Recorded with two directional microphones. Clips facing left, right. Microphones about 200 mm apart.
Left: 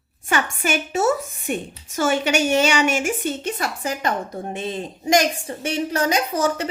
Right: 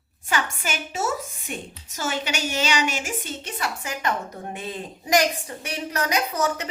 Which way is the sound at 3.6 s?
35° left (ahead or behind).